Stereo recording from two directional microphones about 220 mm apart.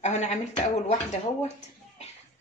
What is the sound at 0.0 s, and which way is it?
Speech, 30° left (ahead or behind).